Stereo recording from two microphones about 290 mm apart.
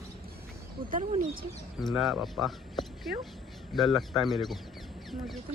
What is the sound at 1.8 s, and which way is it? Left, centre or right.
Speech, centre.